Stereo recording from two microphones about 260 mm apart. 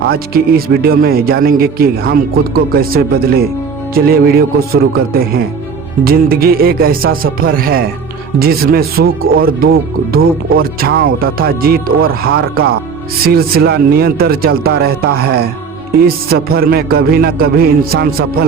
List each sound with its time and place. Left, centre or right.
0.1 s speech: right
9.0 s speech: right
9.4 s speech: right
12.5 s speech: right
13.2 s speech: right